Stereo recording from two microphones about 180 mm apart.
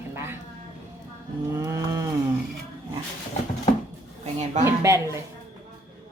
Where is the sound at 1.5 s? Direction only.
20° right (ahead or behind).